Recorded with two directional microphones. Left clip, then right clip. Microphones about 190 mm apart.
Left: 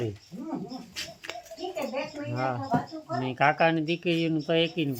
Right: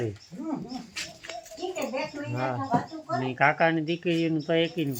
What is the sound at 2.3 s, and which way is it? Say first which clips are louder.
Speech: right 1 dB; 5° left (ahead or behind).